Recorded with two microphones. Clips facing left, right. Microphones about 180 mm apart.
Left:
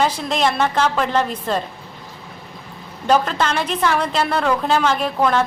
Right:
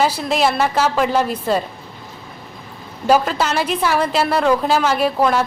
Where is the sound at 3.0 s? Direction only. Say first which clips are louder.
Right 2 dB; 5° right (ahead or behind).